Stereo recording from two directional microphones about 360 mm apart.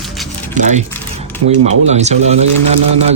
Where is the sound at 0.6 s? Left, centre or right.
Centre.